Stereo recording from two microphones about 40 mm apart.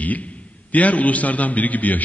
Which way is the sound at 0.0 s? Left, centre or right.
Left.